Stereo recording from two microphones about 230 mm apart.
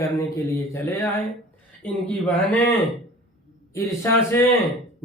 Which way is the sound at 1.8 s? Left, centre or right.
Centre.